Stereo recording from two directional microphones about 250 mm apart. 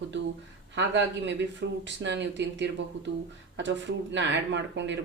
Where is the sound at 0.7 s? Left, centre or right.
Right.